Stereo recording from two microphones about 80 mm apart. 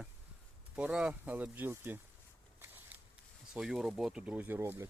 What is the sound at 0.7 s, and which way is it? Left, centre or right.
Speech, centre.